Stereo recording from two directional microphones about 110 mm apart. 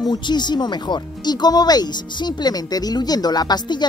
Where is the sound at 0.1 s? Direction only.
40° left (ahead or behind).